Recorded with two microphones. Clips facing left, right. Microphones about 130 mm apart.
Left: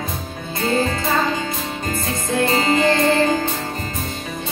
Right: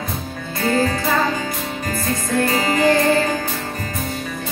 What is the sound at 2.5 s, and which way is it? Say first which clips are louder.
Music: even; 25° left (ahead or behind).